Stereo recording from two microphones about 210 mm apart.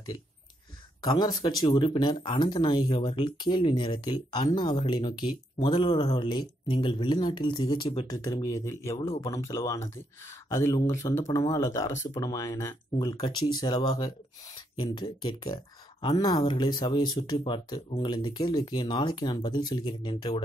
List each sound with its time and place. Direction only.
1.0 s speech: 20° left (ahead or behind)